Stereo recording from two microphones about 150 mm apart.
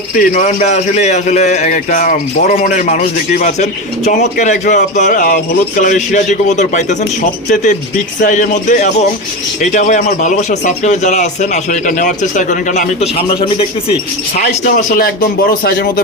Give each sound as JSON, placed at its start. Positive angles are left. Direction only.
{"t": 0.1, "sound": "a man's voice", "side_deg": 60}
{"t": 3.4, "sound": "a man's voice", "side_deg": 50}
{"t": 14.8, "sound": "speech", "side_deg": 65}